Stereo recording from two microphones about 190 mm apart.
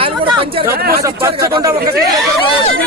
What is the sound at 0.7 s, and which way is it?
Speech, 55° right (ahead or behind).